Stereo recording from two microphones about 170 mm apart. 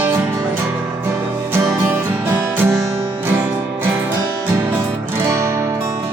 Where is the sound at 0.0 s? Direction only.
15° right (ahead or behind).